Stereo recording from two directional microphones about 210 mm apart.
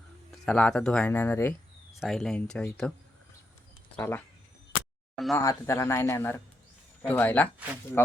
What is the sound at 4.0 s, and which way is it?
Speech, 10° left (ahead or behind).